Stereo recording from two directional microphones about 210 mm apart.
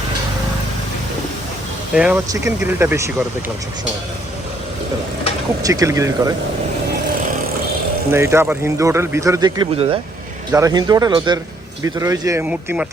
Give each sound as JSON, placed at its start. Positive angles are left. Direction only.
{"t": 2.0, "sound": "speech", "side_deg": -10}
{"t": 5.6, "sound": "speech", "side_deg": -15}
{"t": 8.1, "sound": "speech", "side_deg": -10}